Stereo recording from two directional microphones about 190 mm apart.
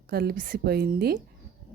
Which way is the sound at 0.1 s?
55° right (ahead or behind).